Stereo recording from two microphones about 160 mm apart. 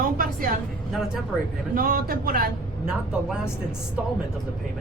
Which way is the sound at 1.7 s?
60° right (ahead or behind).